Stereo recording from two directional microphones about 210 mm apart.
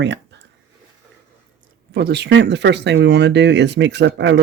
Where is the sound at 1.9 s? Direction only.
50° right (ahead or behind).